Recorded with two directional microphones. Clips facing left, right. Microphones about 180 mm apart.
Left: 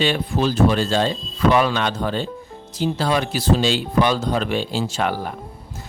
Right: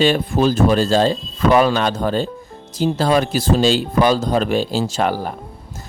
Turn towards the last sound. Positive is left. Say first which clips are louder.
# right 3 dB
turn(degrees=-40)  # may be behind; listen again after turning